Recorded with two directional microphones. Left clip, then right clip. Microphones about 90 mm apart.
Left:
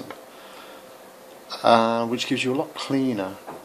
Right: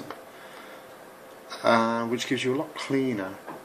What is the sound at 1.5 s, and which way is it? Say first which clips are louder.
Speech: left 5 dB; 15° left (ahead or behind).